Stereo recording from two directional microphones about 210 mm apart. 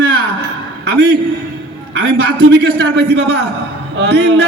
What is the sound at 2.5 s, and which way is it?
A man's voice, 50° right (ahead or behind).